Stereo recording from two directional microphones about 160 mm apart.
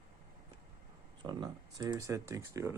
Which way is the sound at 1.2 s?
25° right (ahead or behind).